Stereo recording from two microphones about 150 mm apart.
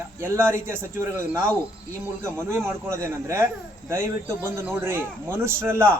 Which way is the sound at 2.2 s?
15° right (ahead or behind).